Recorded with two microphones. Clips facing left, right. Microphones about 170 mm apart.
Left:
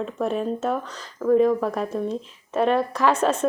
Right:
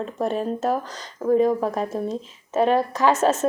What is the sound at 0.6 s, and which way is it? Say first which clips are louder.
Speech: right 2 dB; 35° right (ahead or behind).